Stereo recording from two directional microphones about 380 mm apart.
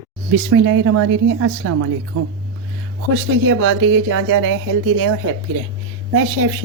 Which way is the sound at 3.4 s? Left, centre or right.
Right.